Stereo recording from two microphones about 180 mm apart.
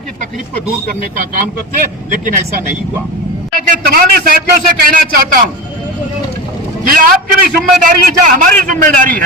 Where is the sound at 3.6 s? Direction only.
50° right (ahead or behind).